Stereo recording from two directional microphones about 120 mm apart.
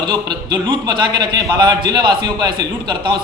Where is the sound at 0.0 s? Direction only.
40° right (ahead or behind).